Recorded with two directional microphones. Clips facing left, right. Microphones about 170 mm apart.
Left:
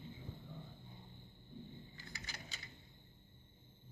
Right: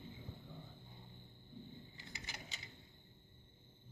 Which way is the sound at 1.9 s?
20° right (ahead or behind).